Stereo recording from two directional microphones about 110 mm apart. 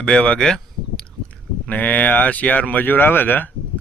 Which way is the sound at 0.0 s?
10° left (ahead or behind).